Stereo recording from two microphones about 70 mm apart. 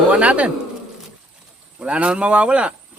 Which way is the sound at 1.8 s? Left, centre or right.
Centre.